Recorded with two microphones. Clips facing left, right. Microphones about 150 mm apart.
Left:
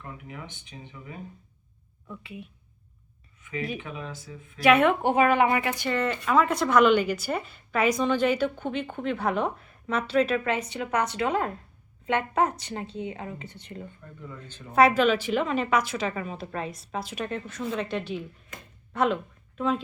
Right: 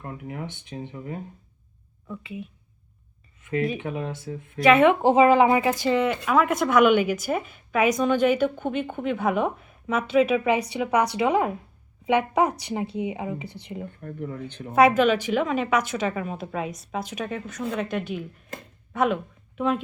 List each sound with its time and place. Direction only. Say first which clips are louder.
0.0 s a sound: right 6 dB; 45° right (ahead or behind)
0.9 s speech: right 6 dB; 40° right (ahead or behind)
2.0 s a woman's voice: right 5 dB; centre (ahead or behind)
3.8 s speech: right 7 dB; 55° right (ahead or behind)
4.6 s a woman's voice: right 3 dB; centre (ahead or behind)
5.0 s speech: right 5 dB; 30° right (ahead or behind)
5.9 s a woman's voice: right 4 dB; 15° right (ahead or behind)
6.2 s a woman's voice: right 2 dB; centre (ahead or behind)
14.0 s speech: right 10 dB; 60° right (ahead or behind)
14.8 s a woman's voice: right 2 dB; centre (ahead or behind)
18.9 s a woman's voice: right 2 dB; 10° right (ahead or behind)